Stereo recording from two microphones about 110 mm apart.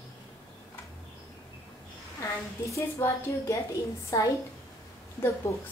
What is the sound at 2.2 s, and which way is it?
A woman's voice, 25° left (ahead or behind).